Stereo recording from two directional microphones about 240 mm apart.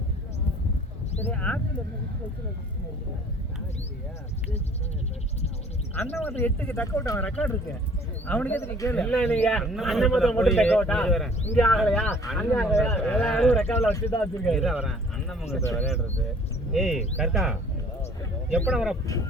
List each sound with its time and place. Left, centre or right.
1.2 s a man's voice: centre
5.9 s a man's voice: centre
15.6 s speech: centre
16.7 s a man's voice: centre
18.7 s a man's voice: centre